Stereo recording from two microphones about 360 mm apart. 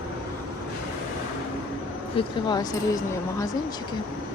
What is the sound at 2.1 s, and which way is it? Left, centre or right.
Speech, centre.